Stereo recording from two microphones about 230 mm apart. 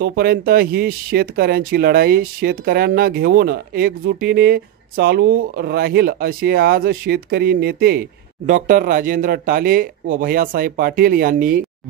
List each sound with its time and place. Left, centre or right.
0.0 s speech: right